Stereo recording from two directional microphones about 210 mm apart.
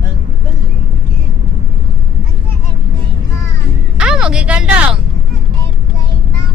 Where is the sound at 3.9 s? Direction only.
5° right (ahead or behind).